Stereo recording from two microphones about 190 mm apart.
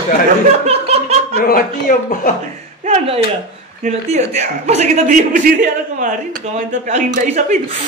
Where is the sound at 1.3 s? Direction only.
50° left (ahead or behind).